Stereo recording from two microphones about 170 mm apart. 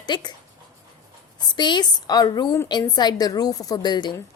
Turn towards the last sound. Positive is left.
turn(degrees=25)  # may be behind; listen again after turning